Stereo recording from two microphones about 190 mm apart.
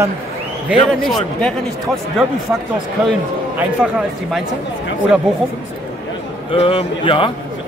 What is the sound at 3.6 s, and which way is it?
Speech, 5° right (ahead or behind).